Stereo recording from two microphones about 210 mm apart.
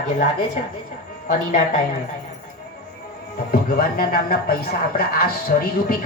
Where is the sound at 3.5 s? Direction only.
45° left (ahead or behind).